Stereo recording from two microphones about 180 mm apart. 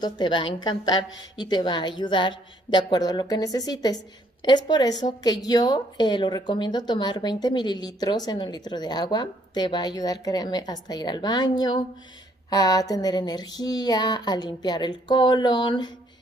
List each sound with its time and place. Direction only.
0.0 s a woman's voice: 25° left (ahead or behind)